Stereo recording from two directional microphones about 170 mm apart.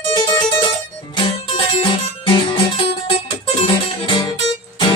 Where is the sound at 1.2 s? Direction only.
30° left (ahead or behind).